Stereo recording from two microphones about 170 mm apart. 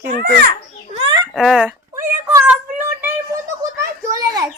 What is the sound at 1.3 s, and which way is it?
Speech, centre (ahead or behind).